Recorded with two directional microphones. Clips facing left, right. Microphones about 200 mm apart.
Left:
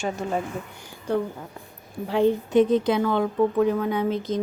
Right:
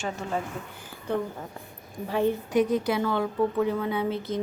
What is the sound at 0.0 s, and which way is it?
Speech, 15° left (ahead or behind).